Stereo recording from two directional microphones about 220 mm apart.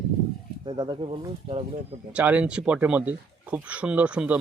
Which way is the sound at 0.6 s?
20° right (ahead or behind).